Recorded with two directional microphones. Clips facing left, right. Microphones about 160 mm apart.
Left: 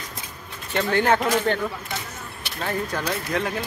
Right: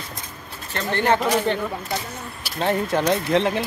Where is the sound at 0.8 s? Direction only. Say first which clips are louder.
Even; 5° left (ahead or behind).